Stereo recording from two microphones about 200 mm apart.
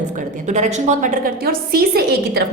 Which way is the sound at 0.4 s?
35° right (ahead or behind).